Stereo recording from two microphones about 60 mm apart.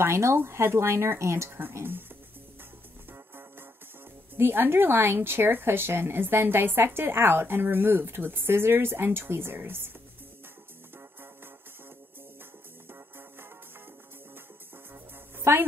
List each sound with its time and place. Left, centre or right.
0.0 s speech: right
1.6 s a woman's voice: right
3.1 s music: right
4.4 s a woman's voice: right
15.3 s music: right